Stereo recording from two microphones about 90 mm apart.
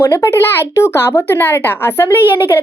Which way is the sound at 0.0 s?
35° left (ahead or behind).